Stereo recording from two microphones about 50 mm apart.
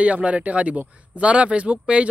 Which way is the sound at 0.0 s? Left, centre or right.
Right.